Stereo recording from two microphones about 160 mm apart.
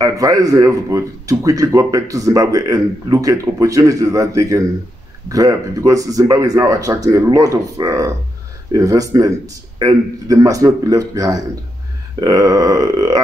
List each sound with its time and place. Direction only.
0.0 s speech: 20° right (ahead or behind)